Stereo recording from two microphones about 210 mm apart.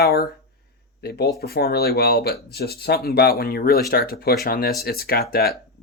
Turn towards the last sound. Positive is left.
turn(degrees=45)  # may be behind; listen again after turning